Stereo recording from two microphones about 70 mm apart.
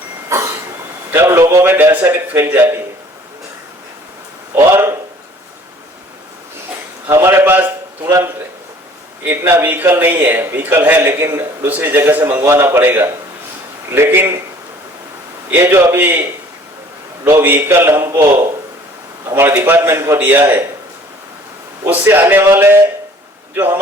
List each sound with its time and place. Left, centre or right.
0.3 s vehicle: right
1.1 s a man's voice: right
1.6 s a man's voice: right
4.5 s a man's voice: right
7.1 s a sound: right
9.2 s a man's voice: right
15.5 s a man's voice: right
17.4 s a man's voice: right
19.5 s a man's voice: right
21.8 s a man's voice: right